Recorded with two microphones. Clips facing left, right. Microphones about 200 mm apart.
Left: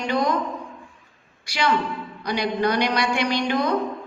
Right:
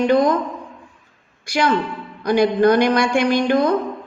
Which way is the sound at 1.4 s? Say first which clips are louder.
Right 4 dB; 50° right (ahead or behind).